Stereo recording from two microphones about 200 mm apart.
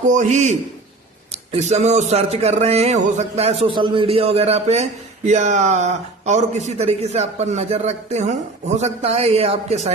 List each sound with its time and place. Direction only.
0.1 s speech: 35° right (ahead or behind)